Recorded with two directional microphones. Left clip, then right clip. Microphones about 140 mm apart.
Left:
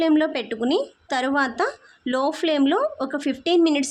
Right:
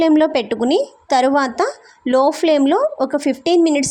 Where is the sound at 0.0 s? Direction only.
45° right (ahead or behind).